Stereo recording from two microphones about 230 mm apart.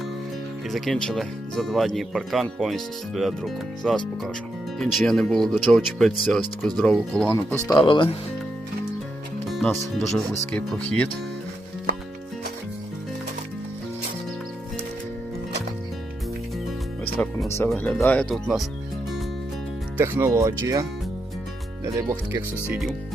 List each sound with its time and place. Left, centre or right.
0.7 s speech: centre
7.9 s speech: left
9.5 s music: centre
10.0 s speech: centre
17.6 s speech: centre
20.0 s speech: centre
21.9 s speech: centre